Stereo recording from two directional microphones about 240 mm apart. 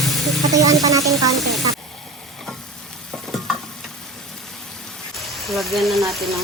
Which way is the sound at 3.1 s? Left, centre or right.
Centre.